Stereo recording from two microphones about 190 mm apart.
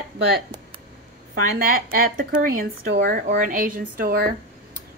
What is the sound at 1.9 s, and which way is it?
A woman's voice, 50° right (ahead or behind).